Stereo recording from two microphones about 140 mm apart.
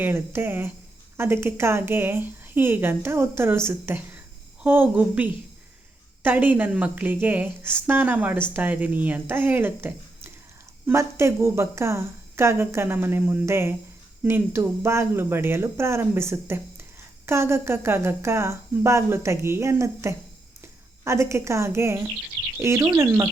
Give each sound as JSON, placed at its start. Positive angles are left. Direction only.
{"t": 0.0, "sound": "a woman's voice", "side_deg": -15}